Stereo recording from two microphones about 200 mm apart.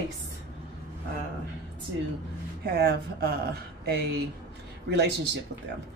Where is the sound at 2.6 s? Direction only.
50° right (ahead or behind).